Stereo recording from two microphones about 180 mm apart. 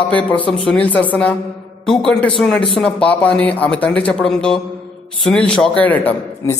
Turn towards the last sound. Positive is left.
turn(degrees=10)  # may be behind; listen again after turning